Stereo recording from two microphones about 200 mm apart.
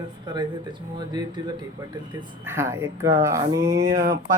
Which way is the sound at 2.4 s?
10° right (ahead or behind).